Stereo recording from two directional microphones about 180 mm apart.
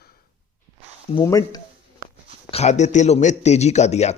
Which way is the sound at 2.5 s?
40° left (ahead or behind).